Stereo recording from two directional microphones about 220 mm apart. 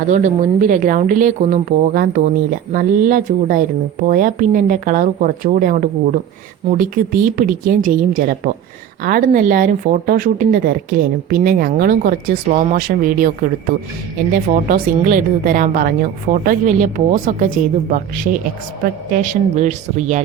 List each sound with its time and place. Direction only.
0.1 s speech: 35° right (ahead or behind)